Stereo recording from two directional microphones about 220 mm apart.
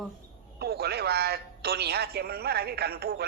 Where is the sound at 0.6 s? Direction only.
45° right (ahead or behind).